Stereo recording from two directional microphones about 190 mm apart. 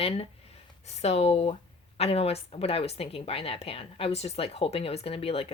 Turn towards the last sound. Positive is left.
turn(degrees=30)  # may be behind; listen again after turning